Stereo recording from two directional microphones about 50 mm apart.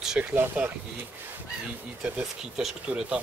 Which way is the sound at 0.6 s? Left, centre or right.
Right.